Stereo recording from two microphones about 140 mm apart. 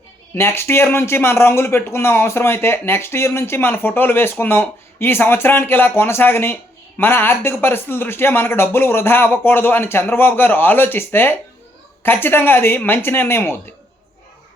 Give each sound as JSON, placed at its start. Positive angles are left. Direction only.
{"t": 0.3, "sound": "speech", "side_deg": 15}